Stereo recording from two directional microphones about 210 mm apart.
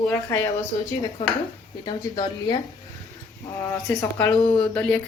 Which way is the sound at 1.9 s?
20° left (ahead or behind).